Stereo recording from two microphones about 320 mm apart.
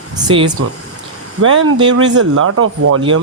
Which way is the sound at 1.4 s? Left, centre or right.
Right.